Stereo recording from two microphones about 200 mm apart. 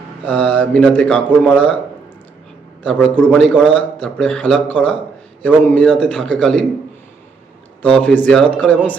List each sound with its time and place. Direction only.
0.3 s speech: 5° left (ahead or behind)
2.8 s a man's voice: 5° left (ahead or behind)
7.8 s speech: 5° left (ahead or behind)